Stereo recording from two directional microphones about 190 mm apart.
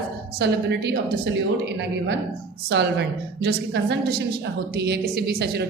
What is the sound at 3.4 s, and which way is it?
A woman's voice, 60° right (ahead or behind).